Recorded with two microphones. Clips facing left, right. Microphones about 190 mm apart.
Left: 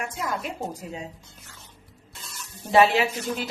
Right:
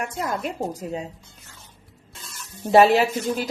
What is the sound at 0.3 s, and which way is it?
Speech, 40° right (ahead or behind).